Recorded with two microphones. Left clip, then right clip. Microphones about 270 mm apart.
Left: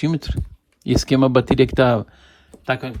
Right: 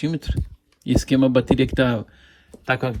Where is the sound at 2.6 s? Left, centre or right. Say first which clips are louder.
Right 1 dB; centre.